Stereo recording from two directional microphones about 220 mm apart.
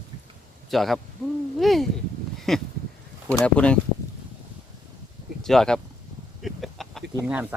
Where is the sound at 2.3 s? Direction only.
Centre (ahead or behind).